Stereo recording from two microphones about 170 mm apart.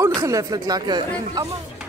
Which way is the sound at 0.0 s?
20° right (ahead or behind).